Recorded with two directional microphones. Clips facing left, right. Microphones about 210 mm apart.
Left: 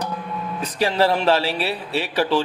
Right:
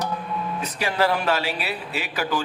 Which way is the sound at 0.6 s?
30° left (ahead or behind).